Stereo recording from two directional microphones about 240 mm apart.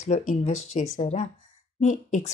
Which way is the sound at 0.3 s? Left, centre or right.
Left.